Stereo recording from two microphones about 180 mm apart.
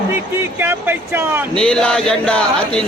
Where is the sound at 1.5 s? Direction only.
5° left (ahead or behind).